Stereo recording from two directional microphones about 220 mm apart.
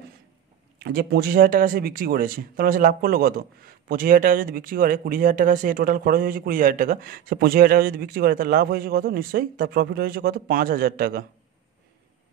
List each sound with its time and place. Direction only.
0.7 s speech: 45° right (ahead or behind)